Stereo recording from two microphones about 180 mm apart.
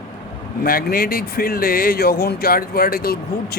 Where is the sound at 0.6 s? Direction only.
55° left (ahead or behind).